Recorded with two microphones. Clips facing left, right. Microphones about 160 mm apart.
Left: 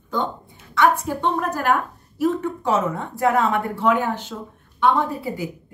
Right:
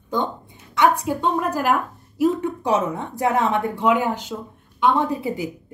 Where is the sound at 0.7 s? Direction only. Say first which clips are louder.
Even; 15° right (ahead or behind).